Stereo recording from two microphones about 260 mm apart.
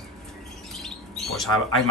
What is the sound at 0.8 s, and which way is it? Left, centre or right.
Bird, centre.